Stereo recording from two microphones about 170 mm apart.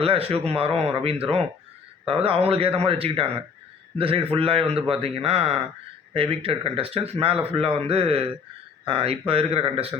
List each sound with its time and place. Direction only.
0.0 s a man's voice: 35° right (ahead or behind)